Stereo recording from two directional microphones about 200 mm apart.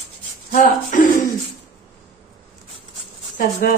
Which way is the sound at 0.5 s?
40° left (ahead or behind).